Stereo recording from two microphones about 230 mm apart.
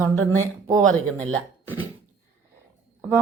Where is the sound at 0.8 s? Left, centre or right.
Centre.